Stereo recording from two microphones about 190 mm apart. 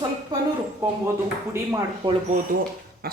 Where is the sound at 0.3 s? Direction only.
20° right (ahead or behind).